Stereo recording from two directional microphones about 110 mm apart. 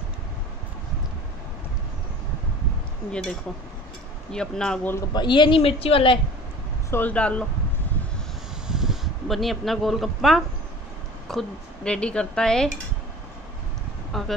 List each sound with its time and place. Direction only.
3.1 s a woman's voice: 5° left (ahead or behind)
5.1 s speech: 45° left (ahead or behind)
6.9 s a woman's voice: 15° left (ahead or behind)
8.6 s a woman's voice: 5° right (ahead or behind)
14.1 s speech: centre (ahead or behind)